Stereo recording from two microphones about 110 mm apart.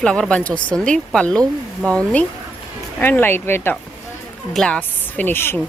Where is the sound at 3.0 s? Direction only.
20° left (ahead or behind).